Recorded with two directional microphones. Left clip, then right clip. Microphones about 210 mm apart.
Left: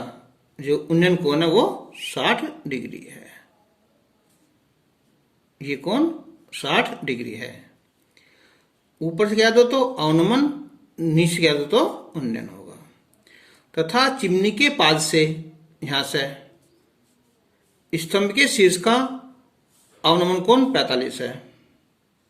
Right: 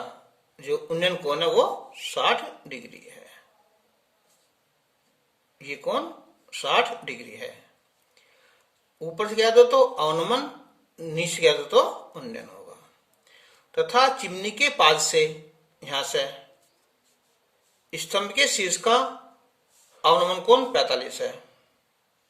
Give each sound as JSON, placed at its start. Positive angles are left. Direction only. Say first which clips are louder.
{"t": 0.5, "sound": "speech", "louder": "left 6 dB", "side_deg": 15}
{"t": 5.5, "sound": "speech", "louder": "left 5 dB", "side_deg": 15}
{"t": 9.3, "sound": "speech", "louder": "even", "side_deg": 10}
{"t": 17.9, "sound": "speech", "louder": "left 4 dB", "side_deg": 15}